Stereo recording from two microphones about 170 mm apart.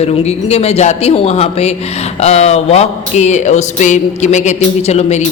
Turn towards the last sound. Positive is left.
turn(degrees=40)  # may be behind; listen again after turning